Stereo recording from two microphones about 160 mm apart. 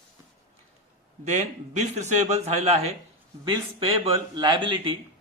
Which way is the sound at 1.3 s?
45° right (ahead or behind).